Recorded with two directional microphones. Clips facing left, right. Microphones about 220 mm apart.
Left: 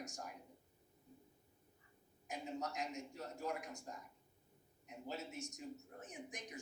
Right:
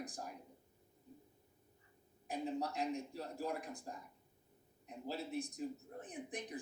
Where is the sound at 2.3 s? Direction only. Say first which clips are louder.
Right 5 dB; 35° right (ahead or behind).